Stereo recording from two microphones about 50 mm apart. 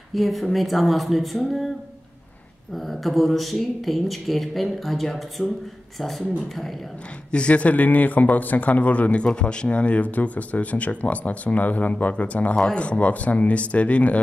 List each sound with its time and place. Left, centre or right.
0.1 s speech: centre
2.7 s speech: centre
7.2 s a man's voice: left